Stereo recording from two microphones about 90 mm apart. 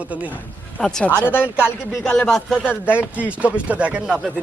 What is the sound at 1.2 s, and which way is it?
Speech, 25° left (ahead or behind).